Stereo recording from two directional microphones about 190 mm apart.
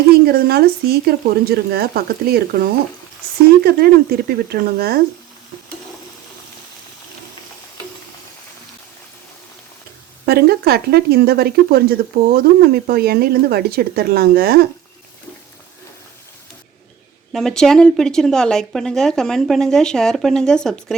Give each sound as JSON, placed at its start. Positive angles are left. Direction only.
{"t": 0.1, "sound": "speech", "side_deg": -55}
{"t": 10.2, "sound": "speech", "side_deg": -55}
{"t": 17.3, "sound": "speech", "side_deg": 5}